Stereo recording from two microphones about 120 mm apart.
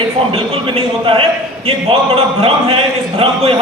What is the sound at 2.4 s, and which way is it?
A man's voice, 50° right (ahead or behind).